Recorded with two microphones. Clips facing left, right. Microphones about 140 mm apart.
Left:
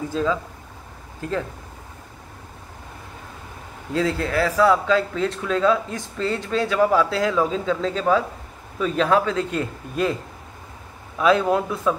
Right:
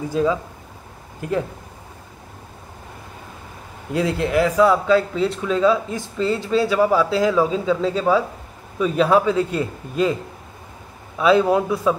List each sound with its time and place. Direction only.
0.1 s speech: 15° right (ahead or behind)
3.9 s speech: 15° right (ahead or behind)
11.1 s speech: 5° right (ahead or behind)